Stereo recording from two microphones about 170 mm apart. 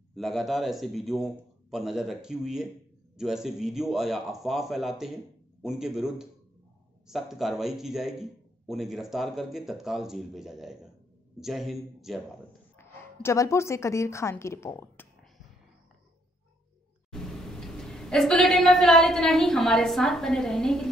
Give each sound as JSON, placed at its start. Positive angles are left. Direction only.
{"t": 0.1, "sound": "a man's voice", "side_deg": 0}
{"t": 12.7, "sound": "a woman's voice", "side_deg": 15}
{"t": 17.1, "sound": "a woman's voice", "side_deg": 5}